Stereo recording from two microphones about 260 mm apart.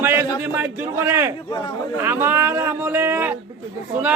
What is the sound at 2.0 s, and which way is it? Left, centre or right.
A man's voice, centre.